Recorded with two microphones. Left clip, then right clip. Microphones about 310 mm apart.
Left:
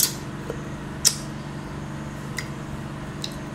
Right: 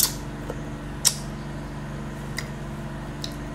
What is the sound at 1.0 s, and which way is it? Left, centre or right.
Tick-tock, centre.